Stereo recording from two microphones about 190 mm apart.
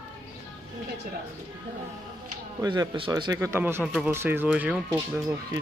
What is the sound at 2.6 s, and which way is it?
Speech, 20° right (ahead or behind).